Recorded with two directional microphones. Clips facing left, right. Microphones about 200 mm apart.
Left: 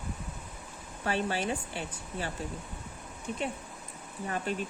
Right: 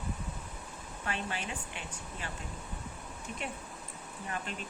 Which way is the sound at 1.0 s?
35° left (ahead or behind).